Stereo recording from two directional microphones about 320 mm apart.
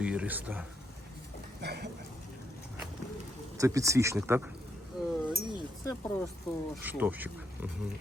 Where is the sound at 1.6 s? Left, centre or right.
Right.